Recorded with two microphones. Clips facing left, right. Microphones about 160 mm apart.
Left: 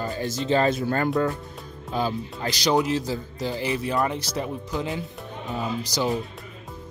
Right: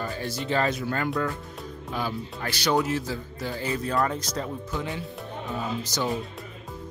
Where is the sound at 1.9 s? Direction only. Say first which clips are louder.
Left 5 dB; 25° left (ahead or behind).